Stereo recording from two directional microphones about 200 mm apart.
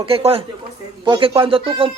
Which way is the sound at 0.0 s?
30° right (ahead or behind).